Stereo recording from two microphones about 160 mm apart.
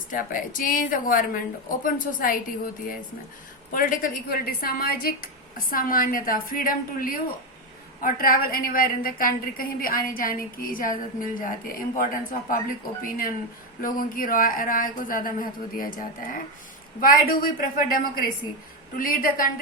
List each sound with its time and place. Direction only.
0.1 s a woman's voice: 55° left (ahead or behind)
3.7 s a woman's voice: 60° left (ahead or behind)